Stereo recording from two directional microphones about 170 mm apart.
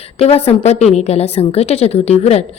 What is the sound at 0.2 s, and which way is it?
A woman's voice, 35° left (ahead or behind).